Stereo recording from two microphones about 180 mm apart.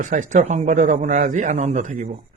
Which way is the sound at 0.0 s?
45° right (ahead or behind).